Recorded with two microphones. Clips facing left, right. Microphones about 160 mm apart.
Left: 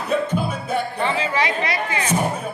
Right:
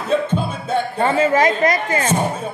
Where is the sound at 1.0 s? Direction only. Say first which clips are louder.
Right 10 dB; 45° right (ahead or behind).